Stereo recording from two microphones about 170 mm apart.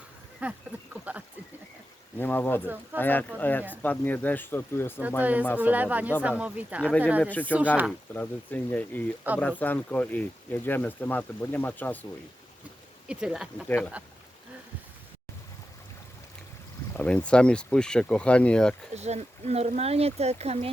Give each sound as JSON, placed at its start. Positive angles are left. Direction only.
{"t": 0.4, "sound": "speech", "side_deg": -10}
{"t": 2.1, "sound": "speech", "side_deg": 10}
{"t": 5.2, "sound": "speech", "side_deg": -10}
{"t": 7.2, "sound": "speech", "side_deg": 10}
{"t": 13.1, "sound": "speech", "side_deg": -5}
{"t": 13.7, "sound": "speech", "side_deg": 10}
{"t": 17.0, "sound": "speech", "side_deg": 5}
{"t": 18.9, "sound": "speech", "side_deg": -40}